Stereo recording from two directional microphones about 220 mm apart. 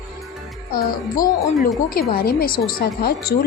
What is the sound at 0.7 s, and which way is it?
A woman's voice, 40° left (ahead or behind).